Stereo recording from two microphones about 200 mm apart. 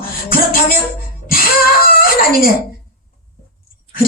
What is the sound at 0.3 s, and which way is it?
Music, 45° left (ahead or behind).